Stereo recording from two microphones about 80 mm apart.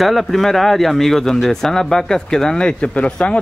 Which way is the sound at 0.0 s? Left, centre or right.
Centre.